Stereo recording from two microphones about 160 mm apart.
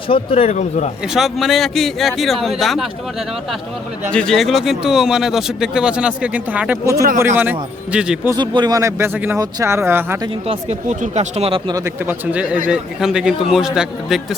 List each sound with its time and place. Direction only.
0.1 s speech: 35° left (ahead or behind)
1.0 s speech: centre (ahead or behind)
4.1 s speech: 5° left (ahead or behind)
6.9 s speech: 75° right (ahead or behind)
7.2 s speech: 15° right (ahead or behind)
8.3 s speech: 25° right (ahead or behind)
10.4 s speech: 40° right (ahead or behind)
12.0 s speech: 10° right (ahead or behind)